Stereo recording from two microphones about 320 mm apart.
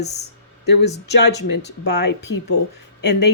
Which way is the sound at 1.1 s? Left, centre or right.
Left.